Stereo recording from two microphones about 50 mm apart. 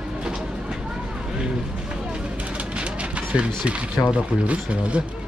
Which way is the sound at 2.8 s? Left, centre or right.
Right.